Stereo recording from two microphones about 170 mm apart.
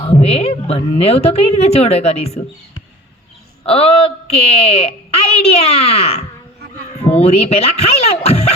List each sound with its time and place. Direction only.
0.0 s a woman's voice: 35° left (ahead or behind)
3.6 s a woman's voice: 35° left (ahead or behind)